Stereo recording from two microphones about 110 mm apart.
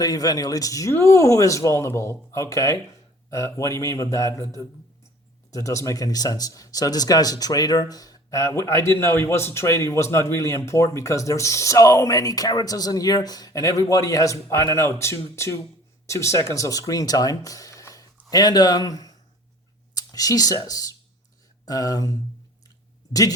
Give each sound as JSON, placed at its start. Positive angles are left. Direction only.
{"t": 0.0, "sound": "speech", "side_deg": 35}
{"t": 5.5, "sound": "speech", "side_deg": 30}
{"t": 19.9, "sound": "a sound", "side_deg": 35}
{"t": 20.7, "sound": "speech", "side_deg": 35}